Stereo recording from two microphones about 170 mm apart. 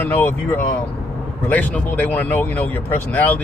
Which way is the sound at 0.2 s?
10° left (ahead or behind).